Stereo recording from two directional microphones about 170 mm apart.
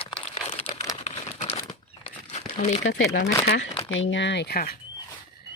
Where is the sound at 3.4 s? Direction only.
90° left; by 4.7 s 65° left (ahead or behind).